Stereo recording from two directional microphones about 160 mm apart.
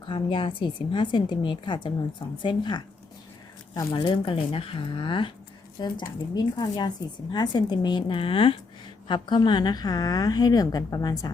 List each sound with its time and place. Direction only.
0.0 s a woman's voice: 30° left (ahead or behind)
3.9 s a woman's voice: 30° left (ahead or behind)